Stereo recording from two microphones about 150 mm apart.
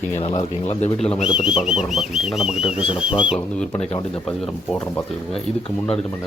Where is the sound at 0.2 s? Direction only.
40° left (ahead or behind).